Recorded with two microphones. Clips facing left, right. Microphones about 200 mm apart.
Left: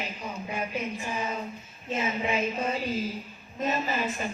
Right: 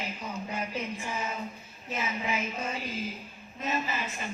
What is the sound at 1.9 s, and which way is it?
Speech, 30° left (ahead or behind).